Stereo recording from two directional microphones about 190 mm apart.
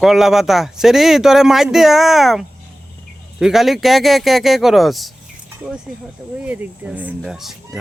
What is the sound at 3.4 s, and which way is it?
Speech, centre (ahead or behind).